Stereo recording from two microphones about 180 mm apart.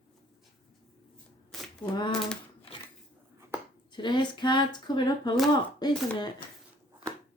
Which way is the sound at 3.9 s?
25° left (ahead or behind).